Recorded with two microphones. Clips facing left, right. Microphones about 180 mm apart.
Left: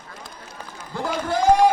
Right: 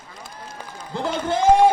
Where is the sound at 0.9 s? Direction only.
20° right (ahead or behind).